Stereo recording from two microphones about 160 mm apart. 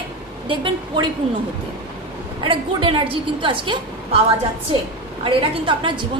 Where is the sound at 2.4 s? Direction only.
35° right (ahead or behind).